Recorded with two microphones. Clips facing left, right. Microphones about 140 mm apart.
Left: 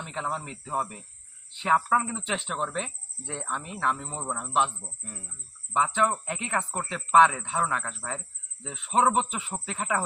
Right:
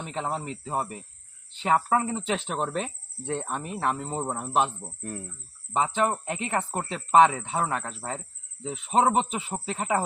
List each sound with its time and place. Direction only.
0.1 s speech: 35° right (ahead or behind)
5.7 s speech: 30° right (ahead or behind)